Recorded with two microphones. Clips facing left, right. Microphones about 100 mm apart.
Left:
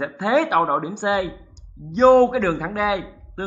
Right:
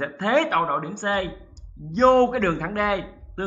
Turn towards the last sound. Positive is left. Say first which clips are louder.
# left 1 dB
turn(degrees=0)  # may be behind; listen again after turning